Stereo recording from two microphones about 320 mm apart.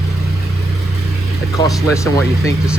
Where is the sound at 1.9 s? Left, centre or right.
Centre.